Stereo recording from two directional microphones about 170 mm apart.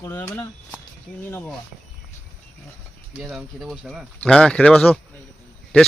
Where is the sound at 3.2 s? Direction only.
5° right (ahead or behind).